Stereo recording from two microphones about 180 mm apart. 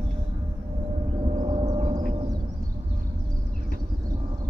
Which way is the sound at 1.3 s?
25° right (ahead or behind).